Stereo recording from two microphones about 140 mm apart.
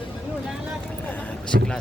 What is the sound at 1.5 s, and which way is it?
Speech, 90° right.